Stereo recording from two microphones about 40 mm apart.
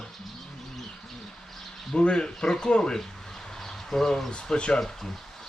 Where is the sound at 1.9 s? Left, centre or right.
Left.